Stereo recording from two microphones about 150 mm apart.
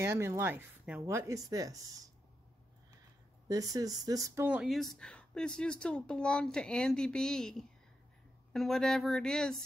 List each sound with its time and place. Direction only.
0.0 s speech: 20° right (ahead or behind)
3.4 s speech: 25° right (ahead or behind)
4.5 s speech: 5° right (ahead or behind)